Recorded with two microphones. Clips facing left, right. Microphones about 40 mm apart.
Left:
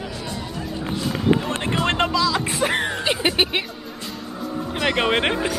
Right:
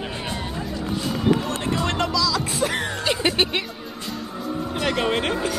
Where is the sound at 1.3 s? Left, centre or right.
Left; by 3.6 s centre.